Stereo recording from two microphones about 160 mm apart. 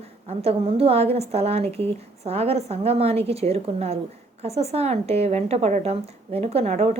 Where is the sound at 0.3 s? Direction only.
40° right (ahead or behind).